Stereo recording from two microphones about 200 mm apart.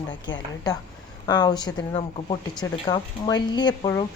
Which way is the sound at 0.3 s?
20° left (ahead or behind).